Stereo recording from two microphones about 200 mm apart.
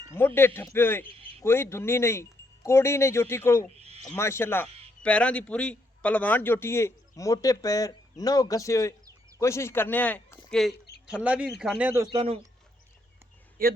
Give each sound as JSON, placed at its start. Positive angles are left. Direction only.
{"t": 0.2, "sound": "a man's voice", "side_deg": 10}
{"t": 12.1, "sound": "speech", "side_deg": -25}
{"t": 13.6, "sound": "speech", "side_deg": -45}